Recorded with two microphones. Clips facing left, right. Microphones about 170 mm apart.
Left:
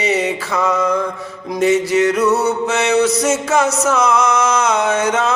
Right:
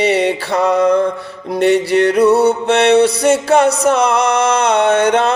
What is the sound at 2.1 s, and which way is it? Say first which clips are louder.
Music: right 5 dB; 30° right (ahead or behind).